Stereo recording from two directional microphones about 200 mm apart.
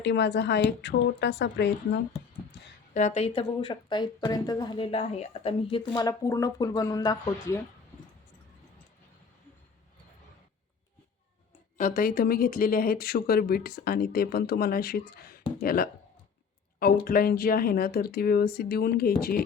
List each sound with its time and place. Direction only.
0.0 s a woman's voice: 60° left (ahead or behind)
2.9 s speech: 35° left (ahead or behind)
5.9 s speech: 15° left (ahead or behind)
11.8 s speech: 45° left (ahead or behind)